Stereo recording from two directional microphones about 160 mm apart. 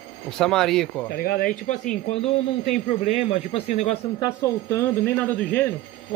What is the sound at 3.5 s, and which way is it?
Speech, 40° left (ahead or behind).